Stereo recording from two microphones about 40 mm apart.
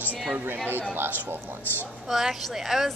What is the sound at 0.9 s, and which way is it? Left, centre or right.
Speech, right.